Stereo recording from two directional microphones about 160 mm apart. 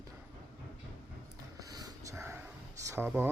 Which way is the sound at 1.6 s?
25° right (ahead or behind).